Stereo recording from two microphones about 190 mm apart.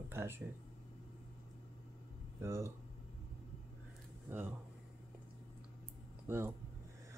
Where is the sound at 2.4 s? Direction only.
15° right (ahead or behind).